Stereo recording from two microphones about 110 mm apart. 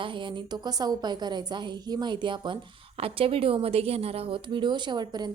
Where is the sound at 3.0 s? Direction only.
55° right (ahead or behind); by 5.3 s 40° right (ahead or behind).